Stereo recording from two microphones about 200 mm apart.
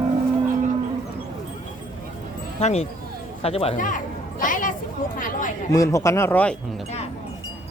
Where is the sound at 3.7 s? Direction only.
40° left (ahead or behind).